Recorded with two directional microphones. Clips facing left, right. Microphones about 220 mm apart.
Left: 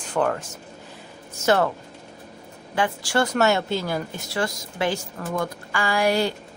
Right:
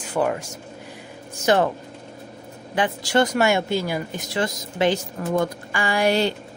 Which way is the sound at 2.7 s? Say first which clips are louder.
Right 2 dB; 20° right (ahead or behind).